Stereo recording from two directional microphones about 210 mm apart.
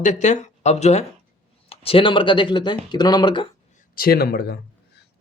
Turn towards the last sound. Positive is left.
turn(degrees=50)  # may be behind; listen again after turning